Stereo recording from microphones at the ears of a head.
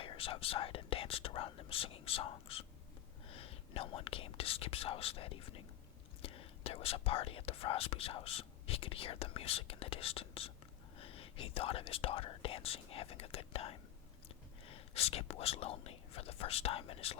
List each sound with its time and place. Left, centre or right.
0.0 s speech: left